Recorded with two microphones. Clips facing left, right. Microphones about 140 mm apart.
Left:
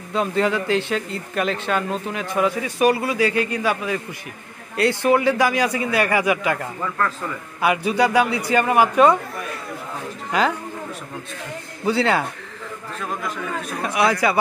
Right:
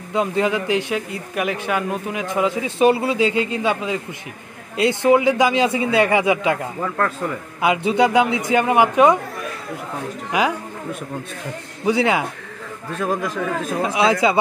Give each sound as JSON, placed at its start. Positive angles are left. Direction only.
{"t": 0.1, "sound": "a man's voice", "side_deg": -15}
{"t": 10.3, "sound": "a man's voice", "side_deg": -15}
{"t": 11.8, "sound": "a man's voice", "side_deg": -15}
{"t": 13.0, "sound": "a man's voice", "side_deg": -90}
{"t": 13.9, "sound": "a man's voice", "side_deg": -20}